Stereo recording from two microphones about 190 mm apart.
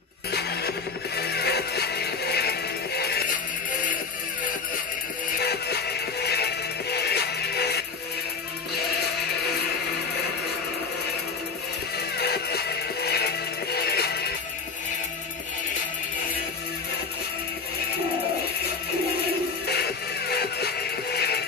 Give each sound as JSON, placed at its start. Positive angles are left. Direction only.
{"t": 0.3, "sound": "music", "side_deg": 60}
{"t": 5.4, "sound": "music", "side_deg": 60}
{"t": 12.2, "sound": "music", "side_deg": 60}
{"t": 19.7, "sound": "music", "side_deg": 55}